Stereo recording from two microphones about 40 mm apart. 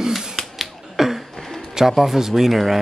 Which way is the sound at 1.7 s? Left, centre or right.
Centre.